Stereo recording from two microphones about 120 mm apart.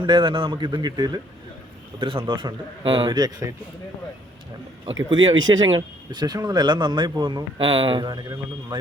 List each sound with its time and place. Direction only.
0.0 s speech: 40° right (ahead or behind)
2.0 s a man's voice: 45° right (ahead or behind)
4.9 s speech: 40° right (ahead or behind)